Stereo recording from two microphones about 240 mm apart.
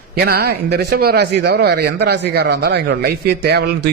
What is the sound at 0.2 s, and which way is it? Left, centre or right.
Speech, right.